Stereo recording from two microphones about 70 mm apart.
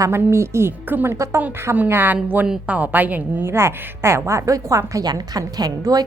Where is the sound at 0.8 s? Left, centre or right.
Right.